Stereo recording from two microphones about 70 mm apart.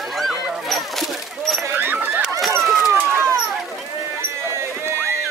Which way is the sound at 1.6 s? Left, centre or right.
Right.